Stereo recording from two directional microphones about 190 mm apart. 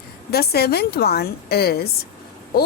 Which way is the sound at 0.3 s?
55° left (ahead or behind).